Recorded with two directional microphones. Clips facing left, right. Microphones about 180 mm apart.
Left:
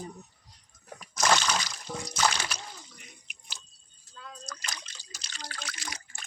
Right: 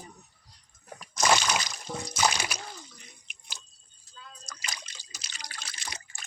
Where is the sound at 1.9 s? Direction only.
5° right (ahead or behind).